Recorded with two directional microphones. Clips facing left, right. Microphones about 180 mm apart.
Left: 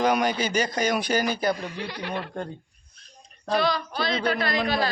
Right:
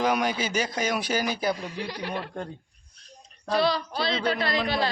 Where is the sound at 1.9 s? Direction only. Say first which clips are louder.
Even; 35° right (ahead or behind).